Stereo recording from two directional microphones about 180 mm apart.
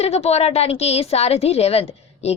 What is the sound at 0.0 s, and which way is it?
A woman's voice, 35° left (ahead or behind).